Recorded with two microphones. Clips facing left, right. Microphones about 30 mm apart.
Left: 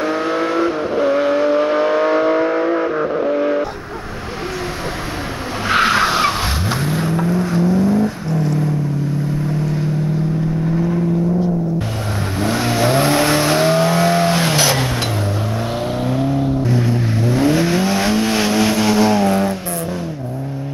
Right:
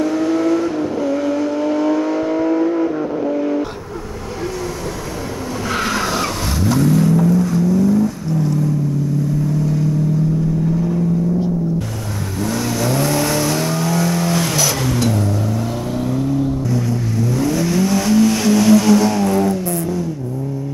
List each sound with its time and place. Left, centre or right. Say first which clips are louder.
0.0 s vehicle: right 2 dB; left
5.7 s vehicle: left 6 dB; left
12.4 s vehicle: left 3 dB; left